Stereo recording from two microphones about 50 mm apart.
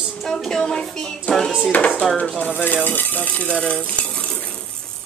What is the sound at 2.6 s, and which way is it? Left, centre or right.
Speech, left.